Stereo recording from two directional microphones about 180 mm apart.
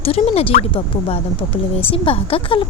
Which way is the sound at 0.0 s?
30° left (ahead or behind).